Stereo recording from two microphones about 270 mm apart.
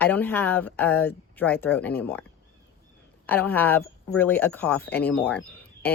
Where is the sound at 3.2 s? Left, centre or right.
Centre.